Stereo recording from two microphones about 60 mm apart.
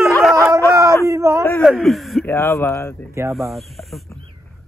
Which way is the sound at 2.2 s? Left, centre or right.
Left.